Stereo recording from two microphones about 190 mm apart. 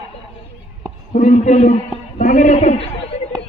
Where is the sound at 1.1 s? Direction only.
40° left (ahead or behind).